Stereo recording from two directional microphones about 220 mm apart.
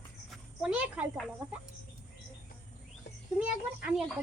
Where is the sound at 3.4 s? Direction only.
5° right (ahead or behind).